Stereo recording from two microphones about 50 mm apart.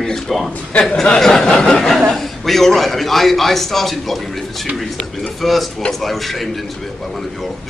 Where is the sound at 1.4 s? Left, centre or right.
Centre.